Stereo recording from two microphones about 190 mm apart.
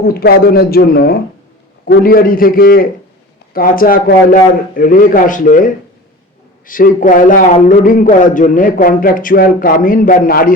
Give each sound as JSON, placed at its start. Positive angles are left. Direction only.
{"t": 0.0, "sound": "a man's voice", "side_deg": 55}